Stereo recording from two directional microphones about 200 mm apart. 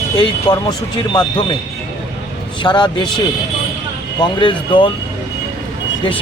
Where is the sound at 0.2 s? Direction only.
20° left (ahead or behind).